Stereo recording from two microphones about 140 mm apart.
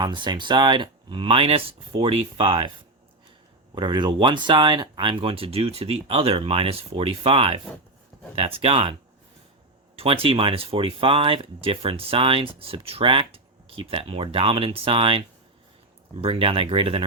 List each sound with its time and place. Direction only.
0.0 s speech: 30° right (ahead or behind)
3.8 s speech: 35° right (ahead or behind)